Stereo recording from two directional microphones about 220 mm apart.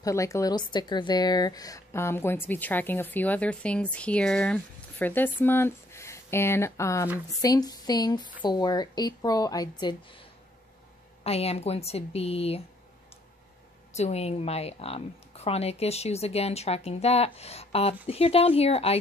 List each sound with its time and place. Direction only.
0.0 s a woman's voice: 15° left (ahead or behind)
11.2 s a woman's voice: 25° left (ahead or behind)
13.9 s a woman's voice: 30° left (ahead or behind)